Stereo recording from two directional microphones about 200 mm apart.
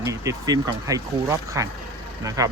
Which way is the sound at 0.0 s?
15° right (ahead or behind).